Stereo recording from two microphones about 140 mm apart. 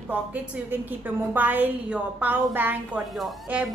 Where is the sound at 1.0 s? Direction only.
15° right (ahead or behind).